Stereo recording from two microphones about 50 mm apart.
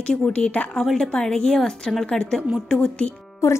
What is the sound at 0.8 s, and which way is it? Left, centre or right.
A woman's voice, centre.